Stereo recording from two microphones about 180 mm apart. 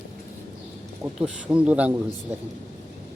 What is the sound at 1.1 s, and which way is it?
A man's voice, 5° right (ahead or behind).